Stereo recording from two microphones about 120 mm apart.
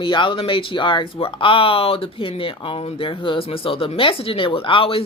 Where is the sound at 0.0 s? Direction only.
45° left (ahead or behind).